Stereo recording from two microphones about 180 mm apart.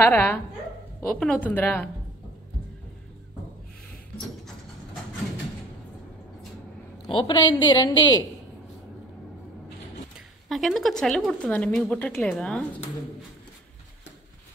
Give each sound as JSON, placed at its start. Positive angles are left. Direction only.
{"t": 0.0, "sound": "a woman's voice", "side_deg": 10}
{"t": 7.0, "sound": "a woman's voice", "side_deg": 25}
{"t": 10.5, "sound": "speech", "side_deg": 0}